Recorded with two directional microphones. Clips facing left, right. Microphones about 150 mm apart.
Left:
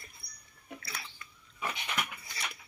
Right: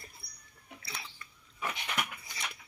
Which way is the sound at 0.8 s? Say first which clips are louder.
Right 2 dB; 25° right (ahead or behind).